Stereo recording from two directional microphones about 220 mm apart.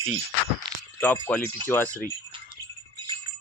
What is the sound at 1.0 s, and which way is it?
Speech, 5° left (ahead or behind).